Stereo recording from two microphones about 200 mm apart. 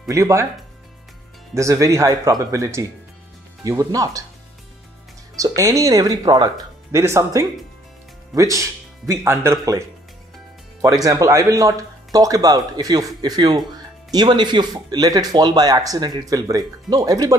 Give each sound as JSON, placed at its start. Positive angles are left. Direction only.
{"t": 0.1, "sound": "speech", "side_deg": -15}
{"t": 1.5, "sound": "speech", "side_deg": -15}
{"t": 5.3, "sound": "speech", "side_deg": -15}